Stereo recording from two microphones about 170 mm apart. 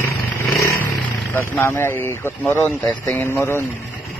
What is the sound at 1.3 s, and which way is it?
A man's voice, 15° left (ahead or behind).